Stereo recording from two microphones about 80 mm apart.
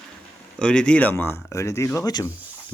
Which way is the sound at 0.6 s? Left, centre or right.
Centre.